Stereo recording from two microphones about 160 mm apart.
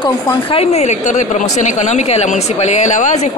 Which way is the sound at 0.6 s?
40° left (ahead or behind).